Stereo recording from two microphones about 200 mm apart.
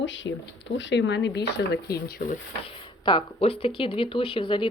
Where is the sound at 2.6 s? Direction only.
25° left (ahead or behind).